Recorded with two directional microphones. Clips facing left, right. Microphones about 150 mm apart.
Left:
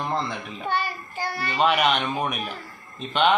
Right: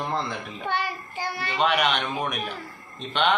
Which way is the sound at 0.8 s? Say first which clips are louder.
Left 1 dB; 20° right (ahead or behind).